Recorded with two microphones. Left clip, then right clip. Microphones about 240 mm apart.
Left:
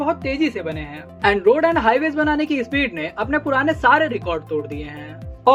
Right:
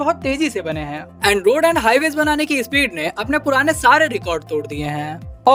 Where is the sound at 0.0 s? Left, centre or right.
Right.